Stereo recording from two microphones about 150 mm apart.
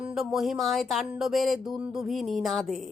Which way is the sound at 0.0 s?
5° right (ahead or behind).